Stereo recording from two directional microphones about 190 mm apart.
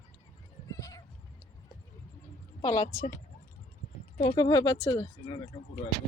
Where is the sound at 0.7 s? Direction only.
20° left (ahead or behind).